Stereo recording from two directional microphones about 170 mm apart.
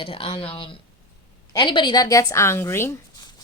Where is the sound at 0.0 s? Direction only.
30° left (ahead or behind).